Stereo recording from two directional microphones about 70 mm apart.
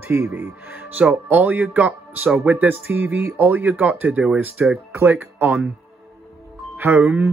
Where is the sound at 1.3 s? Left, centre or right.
Right.